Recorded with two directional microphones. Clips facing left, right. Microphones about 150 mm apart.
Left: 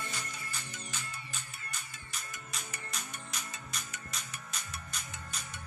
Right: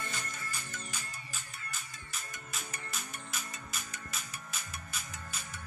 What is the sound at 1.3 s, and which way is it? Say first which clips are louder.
Music: even; centre (ahead or behind).